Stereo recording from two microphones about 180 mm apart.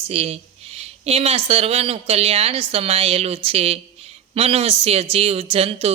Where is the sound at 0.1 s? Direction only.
35° right (ahead or behind).